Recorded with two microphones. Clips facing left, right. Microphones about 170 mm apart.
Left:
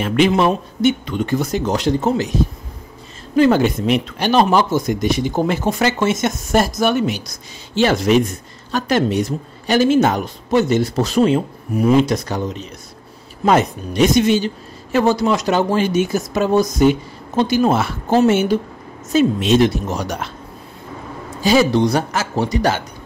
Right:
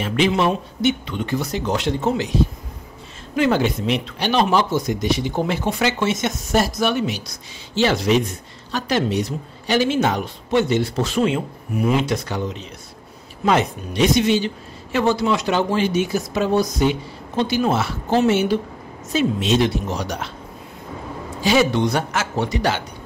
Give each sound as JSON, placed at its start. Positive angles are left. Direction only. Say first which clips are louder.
{"t": 0.0, "sound": "speech", "louder": "left 4 dB", "side_deg": 55}
{"t": 3.3, "sound": "speech", "louder": "left 5 dB", "side_deg": 40}
{"t": 21.4, "sound": "speech", "louder": "left 3 dB", "side_deg": 40}